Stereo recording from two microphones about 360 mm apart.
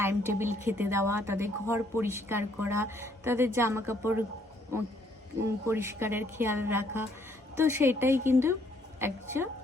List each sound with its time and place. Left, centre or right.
0.0 s a woman's voice: centre